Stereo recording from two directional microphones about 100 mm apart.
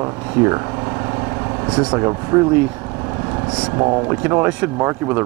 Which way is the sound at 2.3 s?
20° right (ahead or behind).